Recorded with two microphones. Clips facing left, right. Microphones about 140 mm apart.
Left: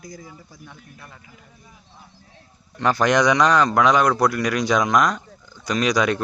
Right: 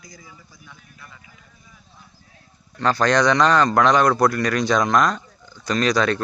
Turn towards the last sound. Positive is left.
turn(degrees=10)  # may be behind; listen again after turning